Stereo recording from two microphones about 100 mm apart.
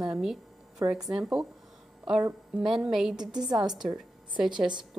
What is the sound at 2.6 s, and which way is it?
Speech, 5° right (ahead or behind).